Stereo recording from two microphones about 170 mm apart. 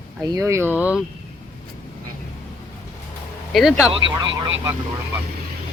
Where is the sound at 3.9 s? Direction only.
30° right (ahead or behind).